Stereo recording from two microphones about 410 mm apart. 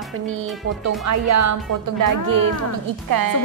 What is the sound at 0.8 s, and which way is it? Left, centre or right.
A woman's voice, right.